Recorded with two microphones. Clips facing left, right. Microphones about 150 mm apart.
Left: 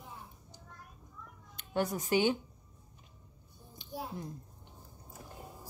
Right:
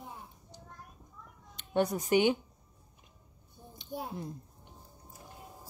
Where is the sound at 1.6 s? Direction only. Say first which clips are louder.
Right 4 dB; 20° right (ahead or behind).